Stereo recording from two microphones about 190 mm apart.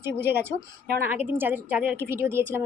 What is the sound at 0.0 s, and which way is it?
Speech, 10° right (ahead or behind).